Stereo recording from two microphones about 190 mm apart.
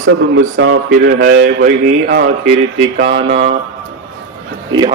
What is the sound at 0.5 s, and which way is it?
Speech, 90° right.